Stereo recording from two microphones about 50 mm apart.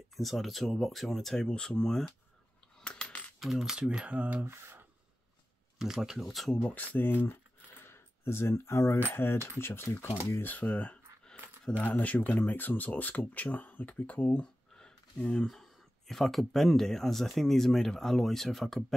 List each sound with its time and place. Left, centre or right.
0.1 s speech: centre
2.8 s coin: left
3.3 s speech: centre; by 4.5 s right
4.5 s speech: right
5.8 s speech: centre
6.6 s speech: left
7.8 s coin: left
9.1 s speech: left
10.4 s speech: left
14.8 s a sound: centre
15.4 s speech: centre